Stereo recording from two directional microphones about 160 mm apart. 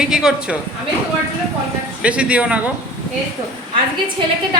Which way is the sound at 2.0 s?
10° right (ahead or behind).